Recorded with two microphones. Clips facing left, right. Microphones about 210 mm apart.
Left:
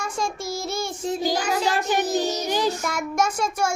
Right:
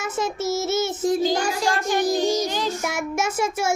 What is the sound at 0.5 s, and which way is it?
Child singing, 25° right (ahead or behind).